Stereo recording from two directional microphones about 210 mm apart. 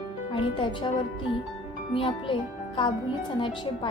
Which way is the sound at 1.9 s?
25° left (ahead or behind).